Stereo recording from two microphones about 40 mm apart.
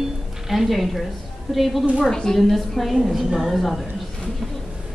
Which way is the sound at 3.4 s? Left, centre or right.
Centre.